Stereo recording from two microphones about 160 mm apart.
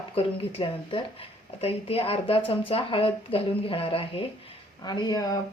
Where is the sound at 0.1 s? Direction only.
35° left (ahead or behind).